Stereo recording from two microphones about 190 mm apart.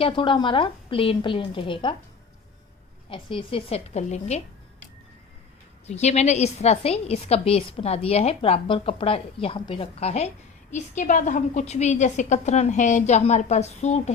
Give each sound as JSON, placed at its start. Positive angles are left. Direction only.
{"t": 0.0, "sound": "a woman's voice", "side_deg": 25}
{"t": 3.1, "sound": "a woman's voice", "side_deg": 25}
{"t": 5.8, "sound": "a woman's voice", "side_deg": 35}